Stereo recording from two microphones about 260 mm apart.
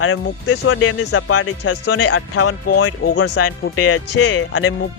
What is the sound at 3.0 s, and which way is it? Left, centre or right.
Speech, left.